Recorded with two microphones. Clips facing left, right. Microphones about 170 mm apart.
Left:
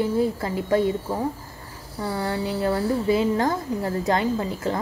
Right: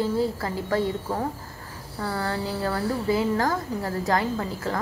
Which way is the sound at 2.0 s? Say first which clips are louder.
Left 2 dB; 15° left (ahead or behind).